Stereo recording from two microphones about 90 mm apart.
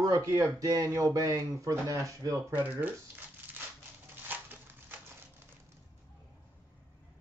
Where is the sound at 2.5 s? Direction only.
20° right (ahead or behind).